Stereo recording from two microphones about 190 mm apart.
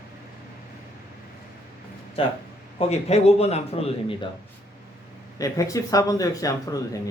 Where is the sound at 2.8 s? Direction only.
35° left (ahead or behind).